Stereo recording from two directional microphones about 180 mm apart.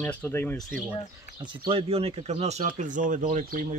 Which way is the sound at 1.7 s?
30° right (ahead or behind).